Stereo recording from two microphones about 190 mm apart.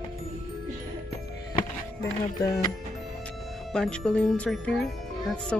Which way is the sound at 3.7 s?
5° left (ahead or behind).